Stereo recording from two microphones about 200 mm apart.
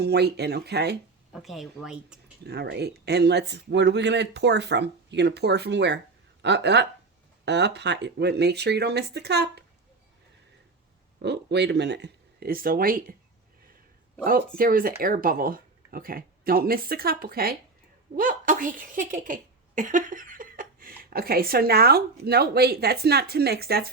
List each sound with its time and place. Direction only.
0.0 s speech: 55° right (ahead or behind)
1.3 s speech: centre (ahead or behind)
2.4 s speech: 55° right (ahead or behind)
11.2 s speech: 60° right (ahead or behind)
14.3 s speech: 45° right (ahead or behind)